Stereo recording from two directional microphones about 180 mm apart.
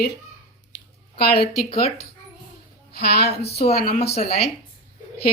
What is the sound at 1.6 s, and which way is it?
Speech, 35° left (ahead or behind).